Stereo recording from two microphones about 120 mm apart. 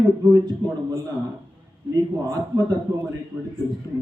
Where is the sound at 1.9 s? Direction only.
30° right (ahead or behind).